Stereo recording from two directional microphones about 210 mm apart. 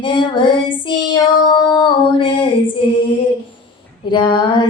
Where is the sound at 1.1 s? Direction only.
20° left (ahead or behind).